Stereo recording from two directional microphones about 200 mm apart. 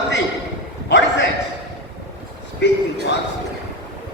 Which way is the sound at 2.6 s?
60° left (ahead or behind).